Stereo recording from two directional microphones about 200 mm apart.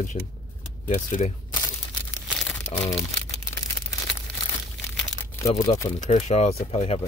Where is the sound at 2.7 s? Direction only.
30° left (ahead or behind).